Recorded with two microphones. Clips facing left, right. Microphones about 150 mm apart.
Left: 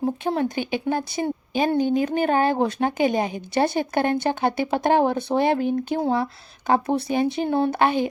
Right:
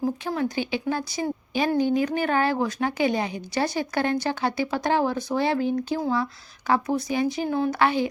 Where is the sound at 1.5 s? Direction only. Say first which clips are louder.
Left 1 dB; 20° left (ahead or behind).